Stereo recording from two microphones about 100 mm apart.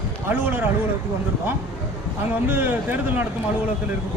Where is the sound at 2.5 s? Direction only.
20° right (ahead or behind).